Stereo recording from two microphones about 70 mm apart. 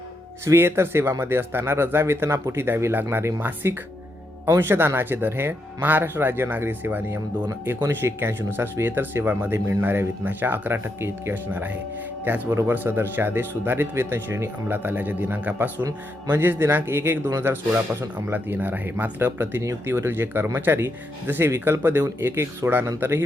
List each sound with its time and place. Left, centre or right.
0.4 s speech: right
18.3 s speech: right
19.2 s speech: right